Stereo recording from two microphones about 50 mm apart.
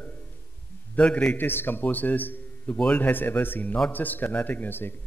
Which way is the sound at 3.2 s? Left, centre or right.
Left.